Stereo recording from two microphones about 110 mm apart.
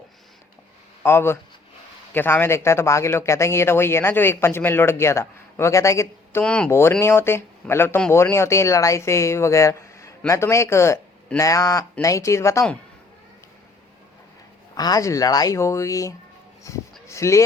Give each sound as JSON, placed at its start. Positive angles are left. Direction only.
{"t": 1.0, "sound": "speech", "side_deg": 20}
{"t": 6.4, "sound": "speech", "side_deg": 10}
{"t": 6.7, "sound": "speech", "side_deg": 25}
{"t": 14.8, "sound": "speech", "side_deg": 35}